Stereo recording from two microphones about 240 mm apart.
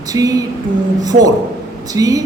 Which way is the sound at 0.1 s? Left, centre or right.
Centre.